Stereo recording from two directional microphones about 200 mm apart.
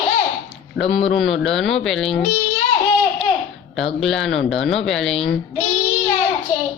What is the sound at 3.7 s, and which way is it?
Speech, centre (ahead or behind).